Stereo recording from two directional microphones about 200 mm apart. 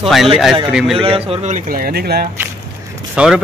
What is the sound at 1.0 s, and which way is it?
A man's voice, 30° right (ahead or behind).